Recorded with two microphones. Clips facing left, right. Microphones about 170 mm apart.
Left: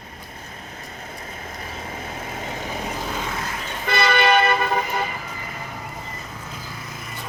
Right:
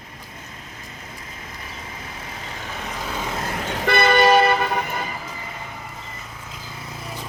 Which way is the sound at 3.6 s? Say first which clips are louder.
Right 6 dB; 75° right (ahead or behind).